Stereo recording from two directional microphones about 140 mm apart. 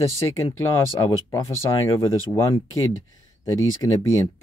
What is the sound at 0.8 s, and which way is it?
Speech, 25° left (ahead or behind).